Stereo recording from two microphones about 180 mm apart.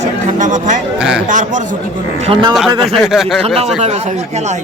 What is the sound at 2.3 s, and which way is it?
Speech, 30° right (ahead or behind).